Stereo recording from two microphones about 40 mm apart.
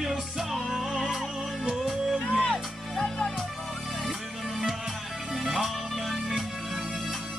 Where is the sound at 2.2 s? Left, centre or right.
Left.